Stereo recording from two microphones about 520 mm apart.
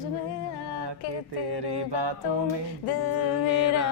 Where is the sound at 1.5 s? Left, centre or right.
Right.